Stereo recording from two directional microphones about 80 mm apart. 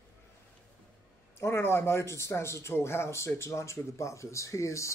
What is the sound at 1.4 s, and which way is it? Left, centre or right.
A man's voice, left.